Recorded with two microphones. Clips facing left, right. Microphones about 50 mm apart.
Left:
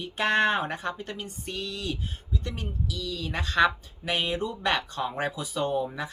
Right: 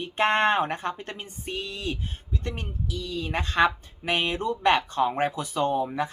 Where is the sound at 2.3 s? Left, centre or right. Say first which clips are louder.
Right 1 dB; right.